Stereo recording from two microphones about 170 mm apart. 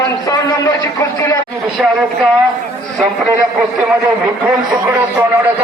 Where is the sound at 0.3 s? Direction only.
20° left (ahead or behind).